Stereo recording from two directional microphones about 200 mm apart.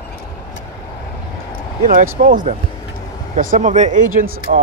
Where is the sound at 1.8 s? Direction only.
45° right (ahead or behind).